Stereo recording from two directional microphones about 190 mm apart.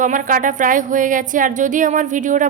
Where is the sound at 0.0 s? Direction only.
45° right (ahead or behind).